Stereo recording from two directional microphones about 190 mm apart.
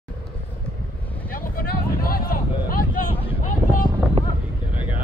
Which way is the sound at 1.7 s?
50° left (ahead or behind).